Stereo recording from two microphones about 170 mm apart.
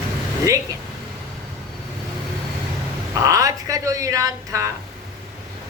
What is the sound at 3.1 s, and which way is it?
Speech, 20° right (ahead or behind).